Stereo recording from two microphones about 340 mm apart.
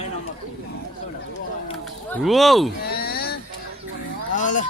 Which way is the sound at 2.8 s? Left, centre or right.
Left.